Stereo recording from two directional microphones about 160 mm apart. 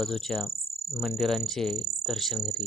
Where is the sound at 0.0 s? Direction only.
Centre (ahead or behind).